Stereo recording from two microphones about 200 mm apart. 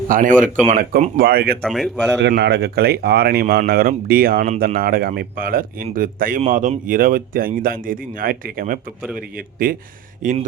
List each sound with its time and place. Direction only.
0.1 s speech: 40° right (ahead or behind)
1.6 s speech: centre (ahead or behind)
2.1 s speech: 60° right (ahead or behind); by 10.4 s 40° right (ahead or behind)